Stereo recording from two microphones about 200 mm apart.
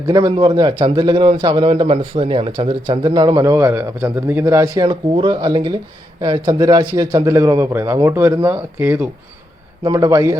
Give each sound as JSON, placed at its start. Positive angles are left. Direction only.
{"t": 0.1, "sound": "a man's voice", "side_deg": -20}